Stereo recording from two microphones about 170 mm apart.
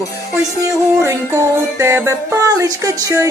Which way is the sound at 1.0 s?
15° right (ahead or behind).